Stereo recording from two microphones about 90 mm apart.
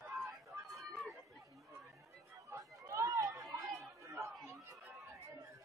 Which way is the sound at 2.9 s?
35° right (ahead or behind).